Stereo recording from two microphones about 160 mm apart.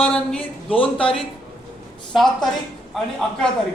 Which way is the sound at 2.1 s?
Centre (ahead or behind).